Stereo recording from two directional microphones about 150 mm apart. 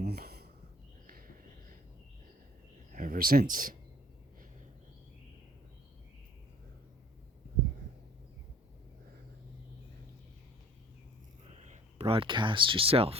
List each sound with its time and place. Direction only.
0.0 s a sound: 90° right
2.9 s speech: 70° right (ahead or behind)
11.6 s speech: 50° right (ahead or behind)